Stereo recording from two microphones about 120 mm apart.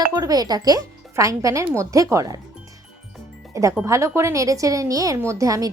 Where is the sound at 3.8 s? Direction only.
25° right (ahead or behind).